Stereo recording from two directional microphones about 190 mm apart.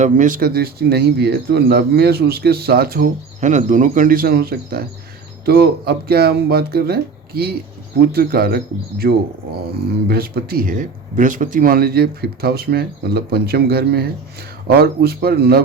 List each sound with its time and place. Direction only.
0.0 s speech: 45° right (ahead or behind)